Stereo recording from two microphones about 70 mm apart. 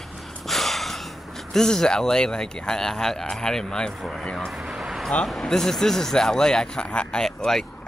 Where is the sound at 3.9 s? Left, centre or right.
Centre.